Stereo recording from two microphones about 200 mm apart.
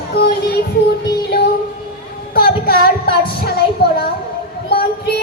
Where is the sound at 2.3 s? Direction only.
50° left (ahead or behind).